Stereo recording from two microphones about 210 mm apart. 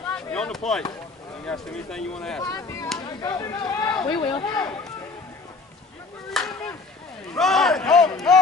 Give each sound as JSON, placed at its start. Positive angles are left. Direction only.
{"t": 0.1, "sound": "chop", "side_deg": 5}
{"t": 1.4, "sound": "speech", "side_deg": 5}
{"t": 2.4, "sound": "speech", "side_deg": 15}
{"t": 6.3, "sound": "chop", "side_deg": 5}
{"t": 7.3, "sound": "speech", "side_deg": 0}